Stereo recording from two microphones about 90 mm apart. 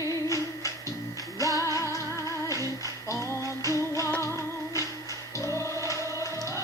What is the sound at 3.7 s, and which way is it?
Music, 35° left (ahead or behind).